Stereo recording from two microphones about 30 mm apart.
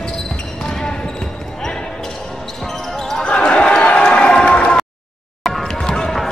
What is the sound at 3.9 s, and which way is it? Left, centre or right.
Run, left.